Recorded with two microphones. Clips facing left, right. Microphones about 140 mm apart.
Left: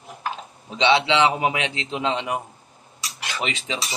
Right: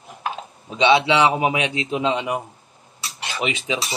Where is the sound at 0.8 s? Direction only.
15° right (ahead or behind).